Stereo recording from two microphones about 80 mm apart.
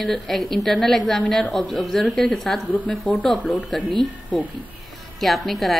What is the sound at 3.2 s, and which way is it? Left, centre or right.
Speech, centre.